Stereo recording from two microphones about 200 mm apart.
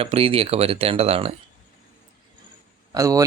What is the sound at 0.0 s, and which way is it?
Speech, 30° right (ahead or behind).